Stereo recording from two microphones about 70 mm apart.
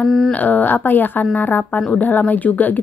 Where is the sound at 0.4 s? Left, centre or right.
Left.